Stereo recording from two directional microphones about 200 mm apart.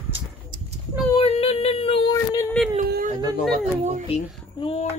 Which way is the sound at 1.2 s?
30° left (ahead or behind).